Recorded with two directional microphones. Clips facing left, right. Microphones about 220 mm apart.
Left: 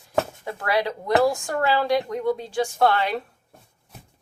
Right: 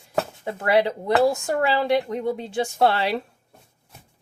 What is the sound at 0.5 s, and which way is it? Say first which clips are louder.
Speech: right 4 dB; 25° right (ahead or behind).